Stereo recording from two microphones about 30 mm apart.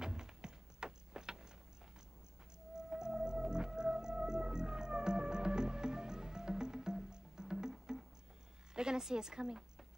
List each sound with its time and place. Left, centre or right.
0.0 s music: right
2.7 s music: right
8.7 s a sound: right
9.2 s speech: right